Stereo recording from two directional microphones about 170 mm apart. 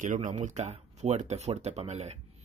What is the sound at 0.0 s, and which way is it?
Speech, 50° right (ahead or behind).